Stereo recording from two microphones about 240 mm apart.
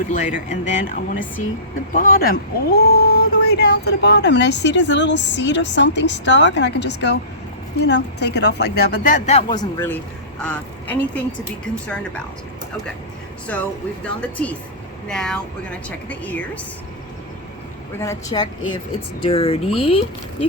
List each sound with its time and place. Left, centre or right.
0.1 s a woman's voice: left; by 12.2 s centre
13.5 s a woman's voice: centre
18.0 s a woman's voice: centre
19.2 s speech: left